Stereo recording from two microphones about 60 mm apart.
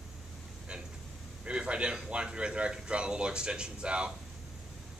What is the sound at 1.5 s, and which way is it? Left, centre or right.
A man's voice, centre.